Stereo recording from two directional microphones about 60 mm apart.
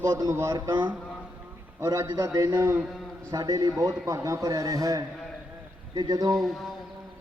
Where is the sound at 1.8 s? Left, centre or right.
Right.